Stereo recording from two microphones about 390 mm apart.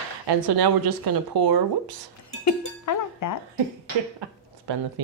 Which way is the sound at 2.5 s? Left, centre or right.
Left.